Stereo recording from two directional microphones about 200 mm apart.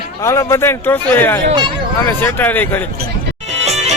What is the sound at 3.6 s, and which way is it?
Music, 35° right (ahead or behind).